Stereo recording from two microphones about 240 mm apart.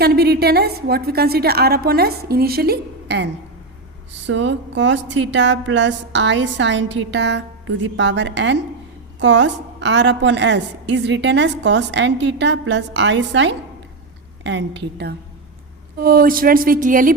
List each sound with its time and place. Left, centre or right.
0.0 s a woman's voice: right
4.3 s a woman's voice: right